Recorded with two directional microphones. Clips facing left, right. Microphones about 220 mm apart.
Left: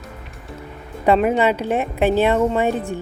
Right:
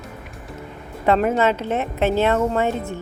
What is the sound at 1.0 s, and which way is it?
Speech, 15° left (ahead or behind).